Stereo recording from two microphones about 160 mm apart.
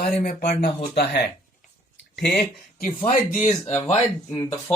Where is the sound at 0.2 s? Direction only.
65° left (ahead or behind).